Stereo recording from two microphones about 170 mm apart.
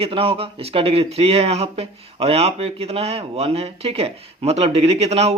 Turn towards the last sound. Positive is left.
turn(degrees=-40)  # may be behind; listen again after turning